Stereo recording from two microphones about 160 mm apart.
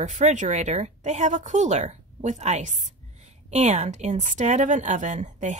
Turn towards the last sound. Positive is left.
turn(degrees=-50)  # may be behind; listen again after turning